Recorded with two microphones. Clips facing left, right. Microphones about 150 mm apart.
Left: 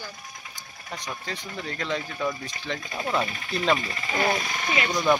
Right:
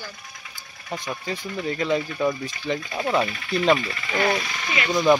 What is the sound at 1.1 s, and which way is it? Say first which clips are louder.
Speech: right 5 dB; 10° right (ahead or behind).